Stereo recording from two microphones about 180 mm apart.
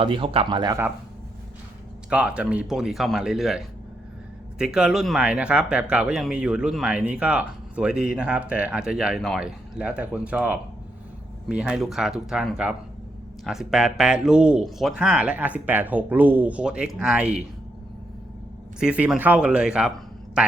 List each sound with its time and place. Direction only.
0.0 s speech: 30° right (ahead or behind)
2.0 s speech: 5° right (ahead or behind)
18.8 s speech: 5° right (ahead or behind)